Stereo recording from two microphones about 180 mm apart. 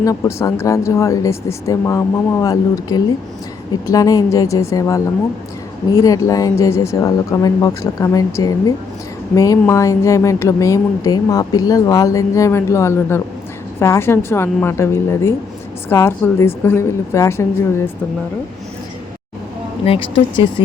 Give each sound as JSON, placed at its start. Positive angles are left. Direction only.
{"t": 0.0, "sound": "speech", "side_deg": 20}
{"t": 19.8, "sound": "speech", "side_deg": 30}